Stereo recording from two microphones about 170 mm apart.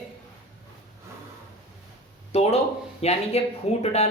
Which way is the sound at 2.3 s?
40° left (ahead or behind).